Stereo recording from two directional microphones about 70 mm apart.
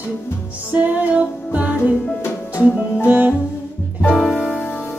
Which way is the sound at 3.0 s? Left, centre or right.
Right.